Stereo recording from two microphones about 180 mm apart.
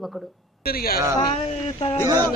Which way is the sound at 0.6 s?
55° left (ahead or behind).